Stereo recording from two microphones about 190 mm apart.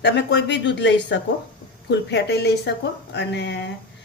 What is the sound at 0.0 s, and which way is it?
Speech, 65° left (ahead or behind).